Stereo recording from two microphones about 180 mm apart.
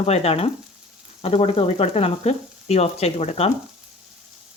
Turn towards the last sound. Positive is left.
turn(degrees=35)  # may be behind; listen again after turning